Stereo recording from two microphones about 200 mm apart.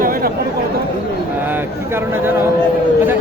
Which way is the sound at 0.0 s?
45° right (ahead or behind).